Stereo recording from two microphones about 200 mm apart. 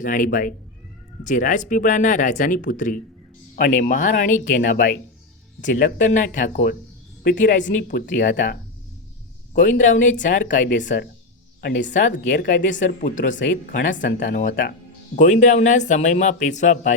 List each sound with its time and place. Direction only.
0.0 s speech: 40° left (ahead or behind)
9.6 s speech: 40° left (ahead or behind)
10.8 s speech: 60° left (ahead or behind)
11.9 s speech: 40° left (ahead or behind)